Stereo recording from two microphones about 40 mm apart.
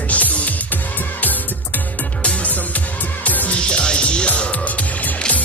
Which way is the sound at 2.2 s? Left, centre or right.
Left.